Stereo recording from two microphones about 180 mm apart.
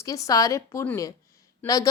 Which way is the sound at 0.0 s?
20° left (ahead or behind).